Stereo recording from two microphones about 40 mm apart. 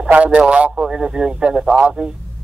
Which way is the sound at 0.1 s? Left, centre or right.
Right.